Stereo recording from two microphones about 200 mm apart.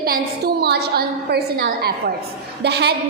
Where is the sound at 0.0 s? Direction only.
50° right (ahead or behind).